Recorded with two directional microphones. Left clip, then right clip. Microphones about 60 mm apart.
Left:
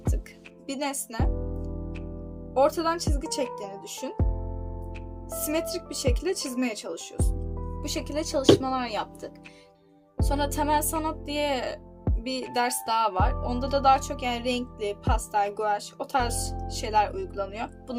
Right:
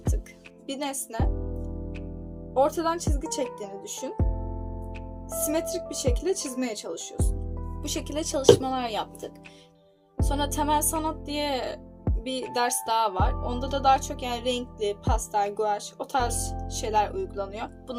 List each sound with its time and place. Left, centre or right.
0.7 s speech: left
1.3 s music: centre
2.5 s speech: left
3.1 s speech: centre
4.2 s music: centre
5.5 s speech: left; by 9.3 s centre
10.2 s music: left
10.9 s speech: centre